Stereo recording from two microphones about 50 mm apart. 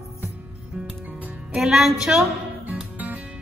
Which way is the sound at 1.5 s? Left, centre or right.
Centre.